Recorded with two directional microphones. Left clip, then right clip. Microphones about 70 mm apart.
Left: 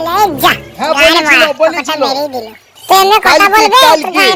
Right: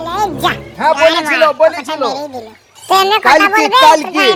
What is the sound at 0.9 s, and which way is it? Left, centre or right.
A man's voice, left.